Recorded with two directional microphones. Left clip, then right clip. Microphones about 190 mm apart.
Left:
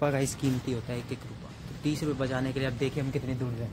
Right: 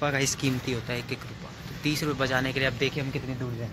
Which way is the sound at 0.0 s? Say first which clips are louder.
Right 2 dB; 40° left (ahead or behind).